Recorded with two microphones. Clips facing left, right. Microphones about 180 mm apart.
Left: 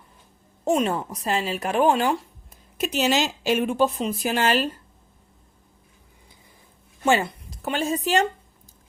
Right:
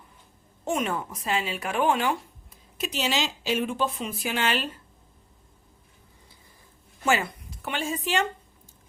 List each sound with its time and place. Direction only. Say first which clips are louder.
0.6 s speech: left 6 dB; 35° left (ahead or behind)
2.7 s speech: left 6 dB; 45° left (ahead or behind)
7.0 s speech: left 4 dB; 30° left (ahead or behind)